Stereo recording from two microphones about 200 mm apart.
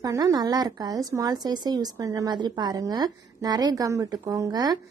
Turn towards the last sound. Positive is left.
turn(degrees=-20)  # may be behind; listen again after turning